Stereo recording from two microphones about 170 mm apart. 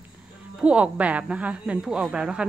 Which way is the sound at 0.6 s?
5° right (ahead or behind).